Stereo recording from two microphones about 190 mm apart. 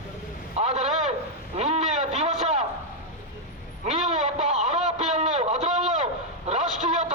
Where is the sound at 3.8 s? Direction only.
40° right (ahead or behind).